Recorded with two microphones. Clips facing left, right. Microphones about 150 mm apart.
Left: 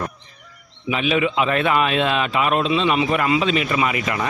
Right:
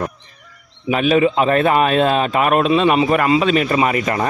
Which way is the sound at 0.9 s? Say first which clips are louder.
Right 6 dB; 45° right (ahead or behind).